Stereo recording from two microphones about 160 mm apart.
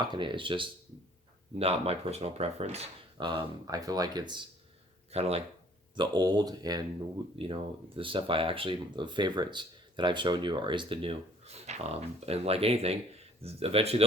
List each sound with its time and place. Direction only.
0.0 s speech: 30° right (ahead or behind)
3.2 s speech: 30° right (ahead or behind)
5.1 s speech: 40° right (ahead or behind)
6.0 s speech: 25° right (ahead or behind)
7.3 s speech: 35° right (ahead or behind)